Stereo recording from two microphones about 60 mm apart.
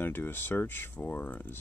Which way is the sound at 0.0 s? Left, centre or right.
Left.